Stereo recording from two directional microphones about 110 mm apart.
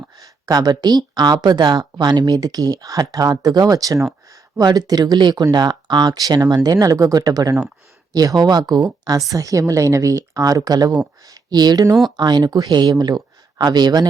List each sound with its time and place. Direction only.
0.2 s speech: 35° right (ahead or behind)